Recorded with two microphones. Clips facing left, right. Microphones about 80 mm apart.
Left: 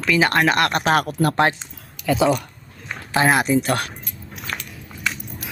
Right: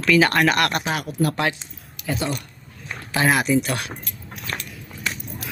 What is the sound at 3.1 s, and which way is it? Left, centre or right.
Speech, left.